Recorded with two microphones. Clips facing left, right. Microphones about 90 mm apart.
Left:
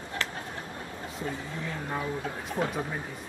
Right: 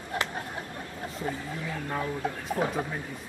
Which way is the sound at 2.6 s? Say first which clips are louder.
Right 1 dB; 15° left (ahead or behind).